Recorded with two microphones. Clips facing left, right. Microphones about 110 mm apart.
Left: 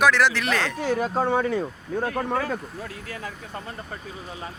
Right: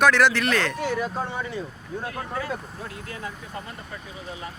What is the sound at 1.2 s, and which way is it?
Speech, 55° left (ahead or behind).